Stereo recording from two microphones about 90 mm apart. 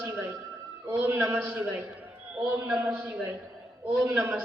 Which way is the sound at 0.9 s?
20° right (ahead or behind).